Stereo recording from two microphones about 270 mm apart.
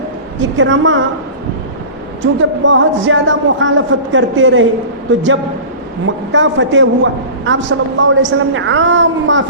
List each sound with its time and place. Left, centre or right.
0.5 s a man's voice: right
2.2 s a man's voice: right
6.1 s a man's voice: right